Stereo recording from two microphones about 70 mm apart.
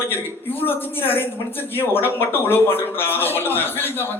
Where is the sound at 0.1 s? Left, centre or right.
Left.